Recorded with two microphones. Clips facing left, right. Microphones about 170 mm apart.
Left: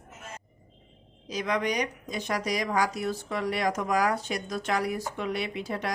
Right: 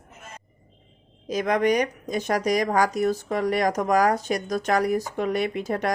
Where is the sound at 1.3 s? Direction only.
50° right (ahead or behind).